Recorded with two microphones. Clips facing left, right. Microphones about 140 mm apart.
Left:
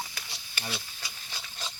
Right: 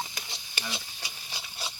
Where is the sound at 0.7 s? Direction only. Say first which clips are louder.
Even; 15° right (ahead or behind).